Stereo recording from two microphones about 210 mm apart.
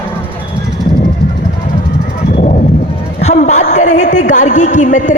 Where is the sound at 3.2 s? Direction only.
35° left (ahead or behind).